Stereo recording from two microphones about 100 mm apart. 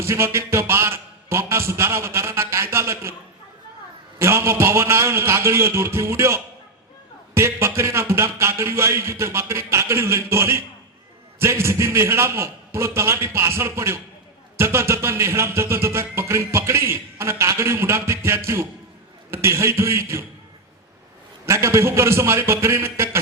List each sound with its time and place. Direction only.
0.0 s a man's voice: 25° right (ahead or behind)
4.2 s speech: 25° right (ahead or behind)
21.4 s speech: 30° right (ahead or behind)